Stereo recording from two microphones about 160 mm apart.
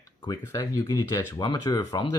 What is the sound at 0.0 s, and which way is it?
Speech, 20° left (ahead or behind).